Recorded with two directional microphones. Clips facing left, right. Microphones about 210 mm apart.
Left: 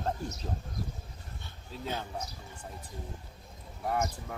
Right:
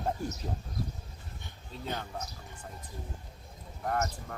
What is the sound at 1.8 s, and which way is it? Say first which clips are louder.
Speech: left 1 dB; 10° left (ahead or behind).